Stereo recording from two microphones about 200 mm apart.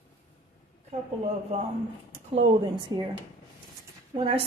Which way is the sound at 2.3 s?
25° right (ahead or behind).